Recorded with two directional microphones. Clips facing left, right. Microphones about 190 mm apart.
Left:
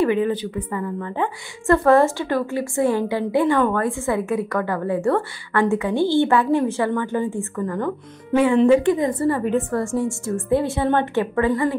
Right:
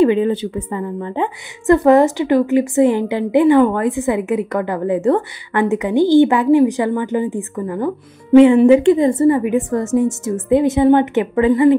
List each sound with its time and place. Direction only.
0.0 s a woman's voice: 25° right (ahead or behind)